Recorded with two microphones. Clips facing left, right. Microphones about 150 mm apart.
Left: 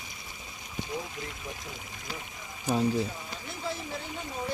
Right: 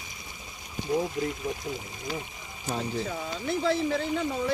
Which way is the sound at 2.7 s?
10° left (ahead or behind).